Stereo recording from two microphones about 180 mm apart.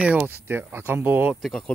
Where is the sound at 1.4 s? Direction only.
Centre (ahead or behind).